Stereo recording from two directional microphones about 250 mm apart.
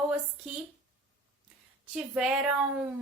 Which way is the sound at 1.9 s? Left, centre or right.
Centre.